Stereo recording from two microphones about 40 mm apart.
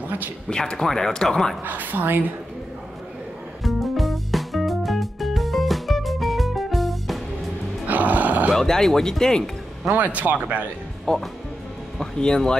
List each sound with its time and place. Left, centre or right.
0.5 s speech: centre
1.6 s speech: right
3.6 s music: centre
7.8 s music: right
8.5 s speech: centre
9.9 s speech: right
11.1 s speech: centre